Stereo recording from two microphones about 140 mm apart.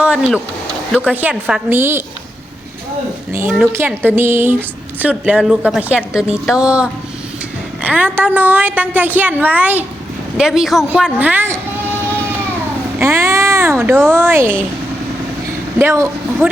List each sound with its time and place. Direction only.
0.0 s a sound: 10° right (ahead or behind)
0.9 s a woman's voice: 10° right (ahead or behind)
3.7 s a woman's voice: 15° right (ahead or behind)
13.0 s a woman's voice: 20° right (ahead or behind)
15.8 s a woman's voice: 15° right (ahead or behind)